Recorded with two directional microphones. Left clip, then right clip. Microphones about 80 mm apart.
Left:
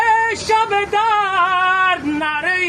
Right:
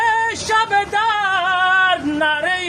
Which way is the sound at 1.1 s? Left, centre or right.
Right.